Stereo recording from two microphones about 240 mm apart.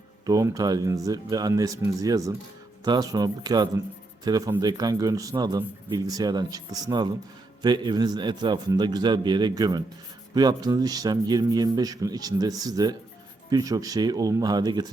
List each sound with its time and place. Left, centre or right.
0.3 s a man's voice: centre